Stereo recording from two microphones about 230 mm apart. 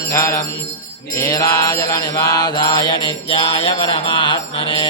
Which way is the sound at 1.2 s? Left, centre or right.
Centre.